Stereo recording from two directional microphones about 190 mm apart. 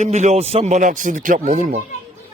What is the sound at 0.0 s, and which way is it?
A man's voice, 35° right (ahead or behind).